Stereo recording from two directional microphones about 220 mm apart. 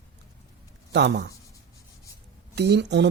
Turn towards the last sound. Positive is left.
turn(degrees=-50)  # may be behind; listen again after turning